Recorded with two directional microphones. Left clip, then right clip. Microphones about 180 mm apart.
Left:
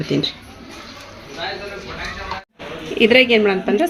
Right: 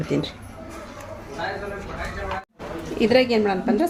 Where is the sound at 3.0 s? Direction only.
35° left (ahead or behind).